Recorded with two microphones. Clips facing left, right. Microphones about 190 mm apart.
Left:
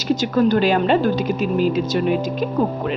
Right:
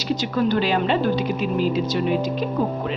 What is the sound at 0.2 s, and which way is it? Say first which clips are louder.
A woman's voice: left 5 dB; 45° left (ahead or behind).